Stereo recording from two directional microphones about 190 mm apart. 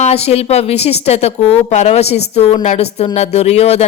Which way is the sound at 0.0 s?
35° left (ahead or behind).